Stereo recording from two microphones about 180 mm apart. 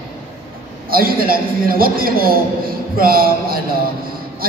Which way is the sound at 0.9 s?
55° right (ahead or behind).